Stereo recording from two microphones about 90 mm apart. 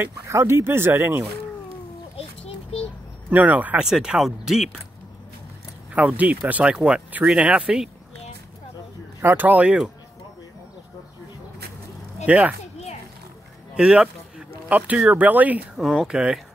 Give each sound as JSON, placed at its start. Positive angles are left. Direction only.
{"t": 0.0, "sound": "speech", "side_deg": -30}
{"t": 2.7, "sound": "a sound", "side_deg": 90}
{"t": 3.3, "sound": "speech", "side_deg": -20}
{"t": 3.8, "sound": "speech", "side_deg": -5}
{"t": 5.9, "sound": "speech", "side_deg": -15}
{"t": 9.2, "sound": "speech", "side_deg": -25}
{"t": 12.3, "sound": "speech", "side_deg": -15}
{"t": 13.7, "sound": "speech", "side_deg": -10}
{"t": 15.7, "sound": "speech", "side_deg": -5}